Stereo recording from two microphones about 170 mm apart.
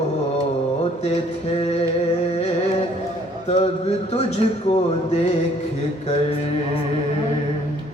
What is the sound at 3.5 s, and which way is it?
Speech, 35° left (ahead or behind).